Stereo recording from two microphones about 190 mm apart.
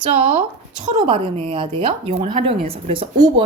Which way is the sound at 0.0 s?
30° right (ahead or behind).